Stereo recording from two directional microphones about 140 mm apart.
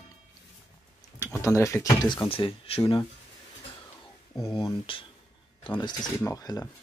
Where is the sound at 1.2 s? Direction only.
20° left (ahead or behind).